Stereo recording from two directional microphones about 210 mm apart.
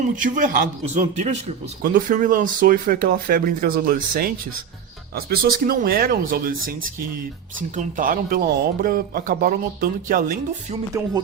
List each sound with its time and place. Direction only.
0.2 s a man's voice: 40° right (ahead or behind)
11.0 s music: 10° right (ahead or behind)